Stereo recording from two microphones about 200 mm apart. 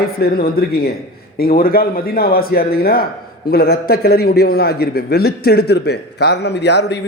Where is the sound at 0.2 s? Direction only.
50° left (ahead or behind).